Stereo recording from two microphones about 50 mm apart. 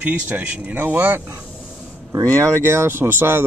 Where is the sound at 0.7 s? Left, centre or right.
Right.